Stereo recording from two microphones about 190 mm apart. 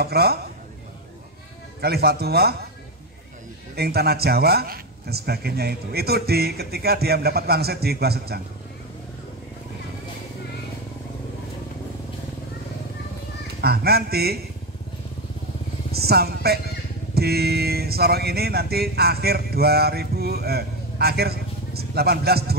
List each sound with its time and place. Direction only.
0.0 s speech: 55° right (ahead or behind)
1.8 s speech: 55° right (ahead or behind)
3.7 s speech: 55° right (ahead or behind)
13.6 s speech: 55° right (ahead or behind)
15.9 s speech: 55° right (ahead or behind)